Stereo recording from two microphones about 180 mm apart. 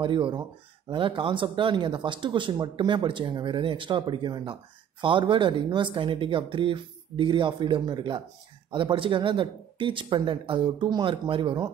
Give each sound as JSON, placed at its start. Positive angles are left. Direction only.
{"t": 0.0, "sound": "speech", "side_deg": -30}